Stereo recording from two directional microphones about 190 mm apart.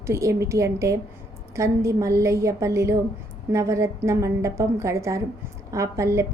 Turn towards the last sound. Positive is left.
turn(degrees=-15)  # may be behind; listen again after turning